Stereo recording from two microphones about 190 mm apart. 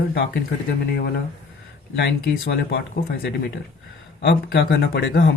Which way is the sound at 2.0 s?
55° left (ahead or behind).